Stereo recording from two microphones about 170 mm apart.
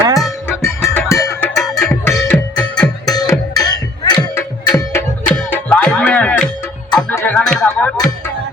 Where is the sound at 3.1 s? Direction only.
20° left (ahead or behind).